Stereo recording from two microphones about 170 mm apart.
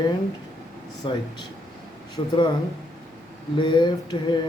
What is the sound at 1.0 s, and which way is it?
A man's voice, 25° left (ahead or behind).